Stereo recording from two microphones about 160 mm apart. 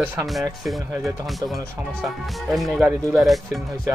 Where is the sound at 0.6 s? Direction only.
Centre (ahead or behind).